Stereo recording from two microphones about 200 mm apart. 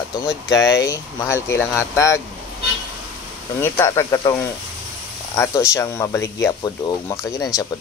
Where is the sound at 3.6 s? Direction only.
15° left (ahead or behind).